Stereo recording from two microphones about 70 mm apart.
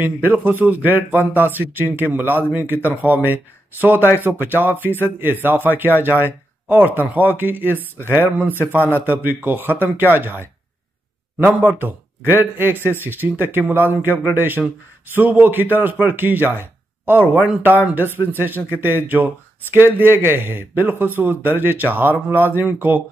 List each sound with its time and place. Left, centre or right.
0.0 s a man's voice: right
12.7 s speech: left
13.0 s speech: right